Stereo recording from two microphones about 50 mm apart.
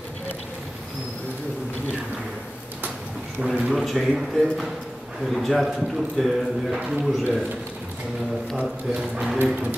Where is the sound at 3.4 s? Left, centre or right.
Right.